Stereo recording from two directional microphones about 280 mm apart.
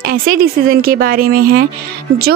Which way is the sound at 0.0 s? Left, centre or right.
Right.